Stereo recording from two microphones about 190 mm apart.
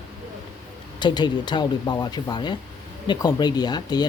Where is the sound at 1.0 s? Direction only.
25° left (ahead or behind).